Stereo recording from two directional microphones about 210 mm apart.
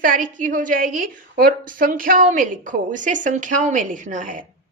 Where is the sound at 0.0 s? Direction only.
40° right (ahead or behind).